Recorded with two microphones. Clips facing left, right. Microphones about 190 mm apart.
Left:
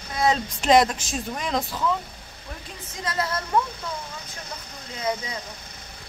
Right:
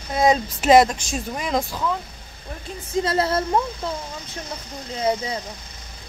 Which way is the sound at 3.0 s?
30° right (ahead or behind).